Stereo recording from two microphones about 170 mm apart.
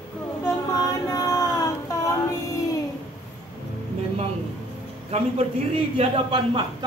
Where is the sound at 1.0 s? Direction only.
15° left (ahead or behind).